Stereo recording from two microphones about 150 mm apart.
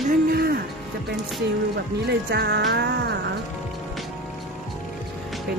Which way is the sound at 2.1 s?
90° right.